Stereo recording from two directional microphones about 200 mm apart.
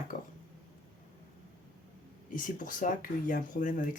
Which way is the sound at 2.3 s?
40° left (ahead or behind).